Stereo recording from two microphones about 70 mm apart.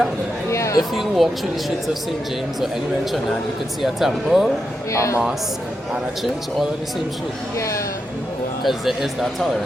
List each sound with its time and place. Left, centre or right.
0.5 s a sound: left
0.8 s speech: centre
2.6 s speech: centre
4.9 s a man's voice: left
5.9 s speech: centre
8.6 s speech: centre